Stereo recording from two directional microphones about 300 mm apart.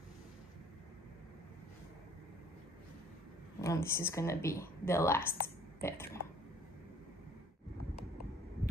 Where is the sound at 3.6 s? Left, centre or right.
Centre.